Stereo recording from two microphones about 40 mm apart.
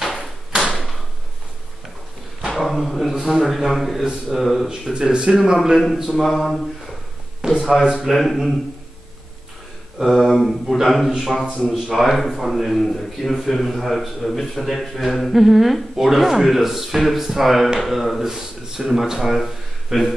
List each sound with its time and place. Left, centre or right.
0.0 s door: centre
0.5 s door: centre
2.5 s speech: centre
3.2 s a man's voice: centre
5.1 s speech: right
5.4 s a man's voice: centre
7.4 s a sound: centre
8.0 s a man's voice: centre
10.1 s a man's voice: centre